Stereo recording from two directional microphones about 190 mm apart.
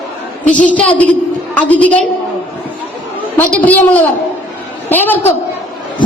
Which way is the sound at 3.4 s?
10° left (ahead or behind).